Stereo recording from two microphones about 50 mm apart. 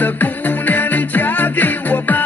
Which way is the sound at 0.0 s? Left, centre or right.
Left.